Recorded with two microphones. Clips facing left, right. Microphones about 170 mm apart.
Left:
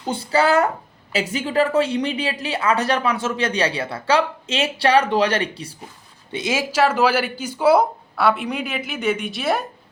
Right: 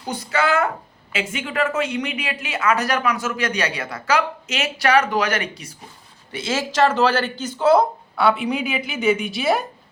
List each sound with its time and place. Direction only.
0.0 s a woman's voice: 30° left (ahead or behind)
6.3 s speech: 15° left (ahead or behind); by 9.6 s centre (ahead or behind)